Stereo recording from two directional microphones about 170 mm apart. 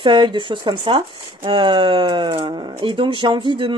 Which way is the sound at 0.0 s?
30° right (ahead or behind).